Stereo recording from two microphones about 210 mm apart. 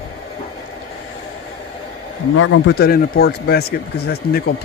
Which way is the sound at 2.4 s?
75° left (ahead or behind).